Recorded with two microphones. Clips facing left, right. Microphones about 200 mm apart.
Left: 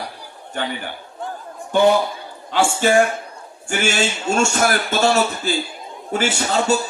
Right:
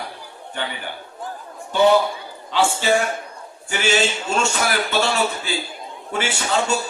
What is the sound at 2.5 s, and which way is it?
A man's voice, 50° left (ahead or behind).